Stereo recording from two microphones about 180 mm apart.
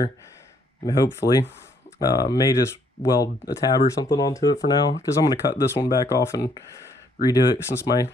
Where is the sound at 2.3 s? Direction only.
20° left (ahead or behind).